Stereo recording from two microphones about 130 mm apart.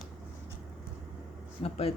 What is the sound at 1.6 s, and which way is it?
Speech, 50° left (ahead or behind).